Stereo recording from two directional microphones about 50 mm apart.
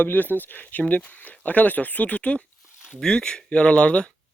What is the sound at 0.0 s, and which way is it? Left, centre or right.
Speech, left.